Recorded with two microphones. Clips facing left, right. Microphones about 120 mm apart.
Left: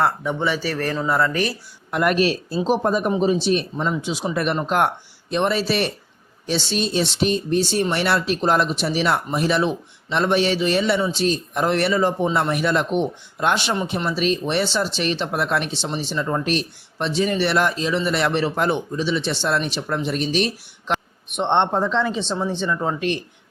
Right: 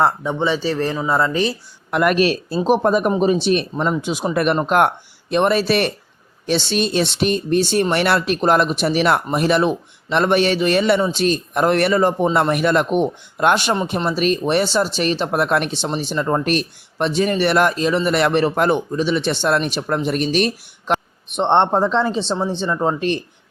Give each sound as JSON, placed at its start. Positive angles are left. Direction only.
{"t": 0.0, "sound": "speech", "side_deg": -25}
{"t": 1.9, "sound": "speech", "side_deg": -80}
{"t": 21.3, "sound": "speech", "side_deg": -35}